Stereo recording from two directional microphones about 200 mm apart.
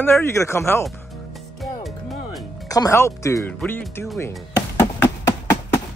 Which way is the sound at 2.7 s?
15° left (ahead or behind).